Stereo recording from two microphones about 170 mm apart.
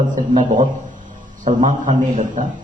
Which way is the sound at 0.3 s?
45° right (ahead or behind).